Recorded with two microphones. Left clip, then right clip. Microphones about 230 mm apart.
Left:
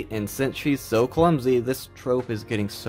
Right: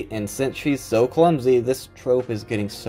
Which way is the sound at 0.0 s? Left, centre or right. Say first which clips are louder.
Right 2 dB; left.